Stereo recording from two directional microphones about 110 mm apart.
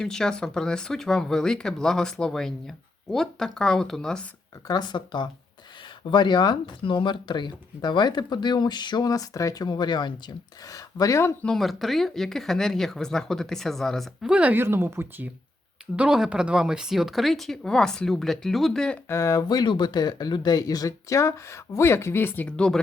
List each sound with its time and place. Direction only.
0.0 s speech: 5° left (ahead or behind)
4.7 s speech: 40° left (ahead or behind)
11.4 s speech: centre (ahead or behind); by 15.3 s 20° right (ahead or behind)
16.0 s speech: 5° right (ahead or behind)
19.0 s speech: 25° left (ahead or behind); by 22.8 s 10° left (ahead or behind)